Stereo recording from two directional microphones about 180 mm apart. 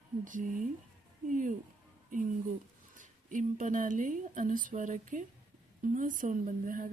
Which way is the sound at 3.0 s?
45° right (ahead or behind).